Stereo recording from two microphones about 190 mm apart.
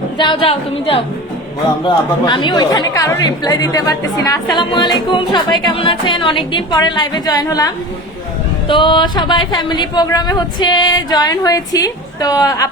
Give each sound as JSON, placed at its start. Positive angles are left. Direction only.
{"t": 0.2, "sound": "speech", "side_deg": 25}
{"t": 2.2, "sound": "speech", "side_deg": 25}